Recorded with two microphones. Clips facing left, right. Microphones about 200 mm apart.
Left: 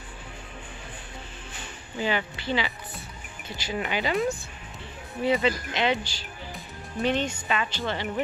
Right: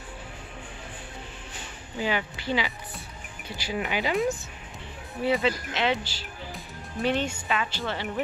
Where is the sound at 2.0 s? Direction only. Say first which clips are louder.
Left 1 dB; 5° right (ahead or behind).